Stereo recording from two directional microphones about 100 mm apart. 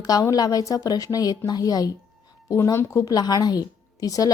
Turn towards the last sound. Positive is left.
turn(degrees=35)  # may be behind; listen again after turning